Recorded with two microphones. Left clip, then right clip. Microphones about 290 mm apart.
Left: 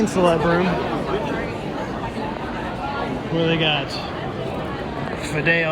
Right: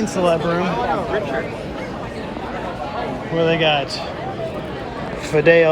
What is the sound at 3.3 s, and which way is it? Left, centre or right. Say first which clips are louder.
Speech: right 4 dB; centre.